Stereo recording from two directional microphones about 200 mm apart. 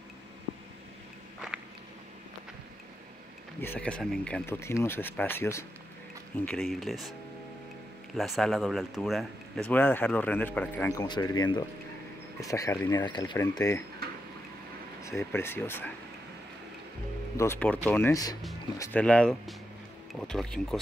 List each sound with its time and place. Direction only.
3.6 s speech: 10° left (ahead or behind)
8.2 s speech: centre (ahead or behind)
15.0 s speech: 15° left (ahead or behind)
17.4 s speech: 10° left (ahead or behind)
18.8 s speech: 5° left (ahead or behind)